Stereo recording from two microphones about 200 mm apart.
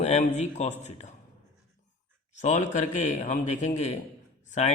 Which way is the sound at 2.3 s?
35° left (ahead or behind).